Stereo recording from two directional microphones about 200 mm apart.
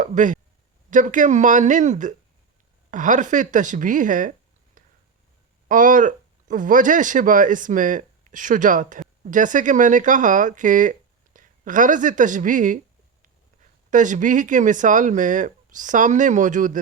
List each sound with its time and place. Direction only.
0.0 s a woman's voice: 40° right (ahead or behind)
13.9 s speech: 40° right (ahead or behind)